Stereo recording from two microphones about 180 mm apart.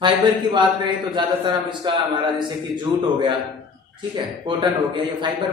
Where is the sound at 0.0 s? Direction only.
25° right (ahead or behind).